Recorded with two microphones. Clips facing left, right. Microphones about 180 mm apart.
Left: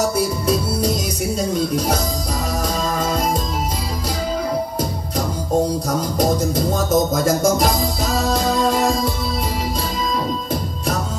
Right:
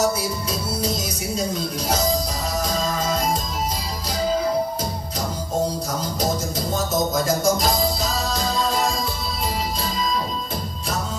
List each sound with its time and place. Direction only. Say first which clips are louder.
7.2 s music: left 4 dB; 55° left (ahead or behind)